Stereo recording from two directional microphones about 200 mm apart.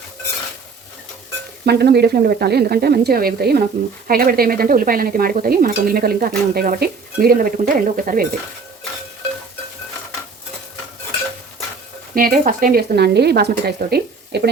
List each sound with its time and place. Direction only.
1.6 s stir: 55° right (ahead or behind)
12.1 s stir: 45° right (ahead or behind)
13.7 s speech: 50° right (ahead or behind)